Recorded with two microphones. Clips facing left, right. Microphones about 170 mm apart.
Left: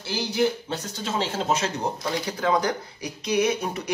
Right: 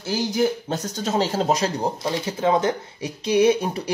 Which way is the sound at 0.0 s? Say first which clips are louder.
Right 2 dB; 45° right (ahead or behind).